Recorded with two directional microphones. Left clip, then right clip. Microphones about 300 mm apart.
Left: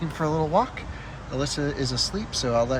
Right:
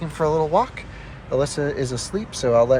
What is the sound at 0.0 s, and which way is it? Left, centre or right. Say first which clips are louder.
Speech: right 5 dB; centre.